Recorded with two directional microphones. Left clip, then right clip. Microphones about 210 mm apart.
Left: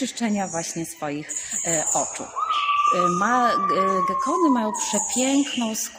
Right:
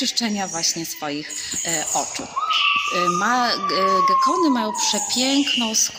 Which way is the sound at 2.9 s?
30° left (ahead or behind).